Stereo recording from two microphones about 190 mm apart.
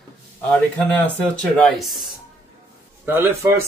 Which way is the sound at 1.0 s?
5° left (ahead or behind).